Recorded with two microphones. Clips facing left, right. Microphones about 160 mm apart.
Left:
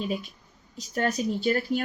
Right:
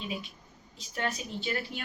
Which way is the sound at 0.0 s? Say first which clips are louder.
Left 7 dB; 45° left (ahead or behind).